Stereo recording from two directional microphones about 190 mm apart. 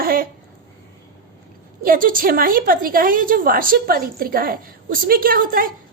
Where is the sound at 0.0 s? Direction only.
50° right (ahead or behind).